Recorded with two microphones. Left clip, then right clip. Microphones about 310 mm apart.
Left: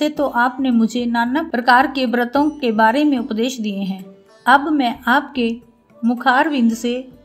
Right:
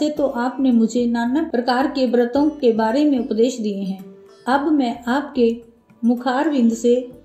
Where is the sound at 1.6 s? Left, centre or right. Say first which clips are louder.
Left 8 dB; left.